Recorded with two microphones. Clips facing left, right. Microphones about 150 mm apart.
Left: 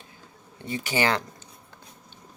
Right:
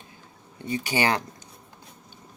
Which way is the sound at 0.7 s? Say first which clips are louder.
Right 1 dB; 15° right (ahead or behind).